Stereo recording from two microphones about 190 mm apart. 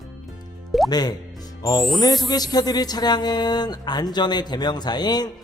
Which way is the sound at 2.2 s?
20° left (ahead or behind).